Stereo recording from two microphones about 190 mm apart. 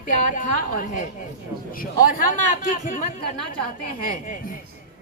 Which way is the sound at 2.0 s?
45° left (ahead or behind).